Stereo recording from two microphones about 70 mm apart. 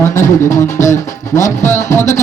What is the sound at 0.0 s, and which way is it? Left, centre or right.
Music, left.